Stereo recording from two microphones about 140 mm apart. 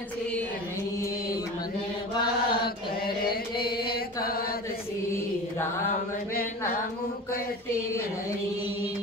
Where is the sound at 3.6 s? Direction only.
90° left.